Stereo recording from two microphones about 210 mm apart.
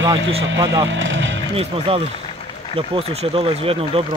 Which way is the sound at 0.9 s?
65° right (ahead or behind).